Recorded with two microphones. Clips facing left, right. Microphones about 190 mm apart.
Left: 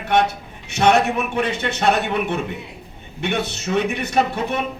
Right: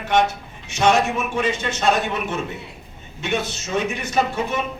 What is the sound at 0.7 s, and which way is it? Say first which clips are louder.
A man's voice: left 2 dB; 60° left (ahead or behind).